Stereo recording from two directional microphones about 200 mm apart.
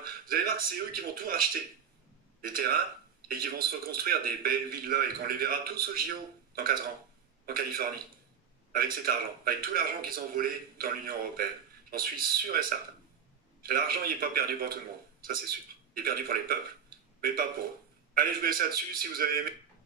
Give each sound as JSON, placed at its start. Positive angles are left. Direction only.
{"t": 0.0, "sound": "a man's voice", "side_deg": -45}
{"t": 2.4, "sound": "speech", "side_deg": -50}